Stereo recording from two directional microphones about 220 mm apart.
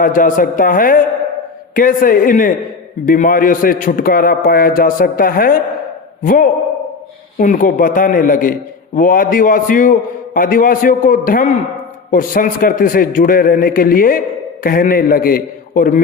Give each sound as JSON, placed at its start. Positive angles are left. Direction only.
{"t": 0.0, "sound": "a man's voice", "side_deg": 40}